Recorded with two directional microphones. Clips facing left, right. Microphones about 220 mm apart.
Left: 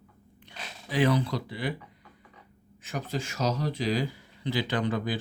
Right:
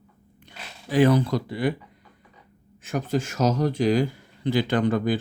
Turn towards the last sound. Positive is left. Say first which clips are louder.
# right 7 dB
turn(degrees=-50)  # may be behind; listen again after turning